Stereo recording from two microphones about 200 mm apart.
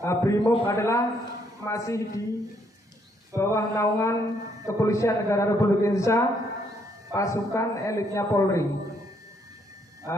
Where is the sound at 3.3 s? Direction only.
15° left (ahead or behind).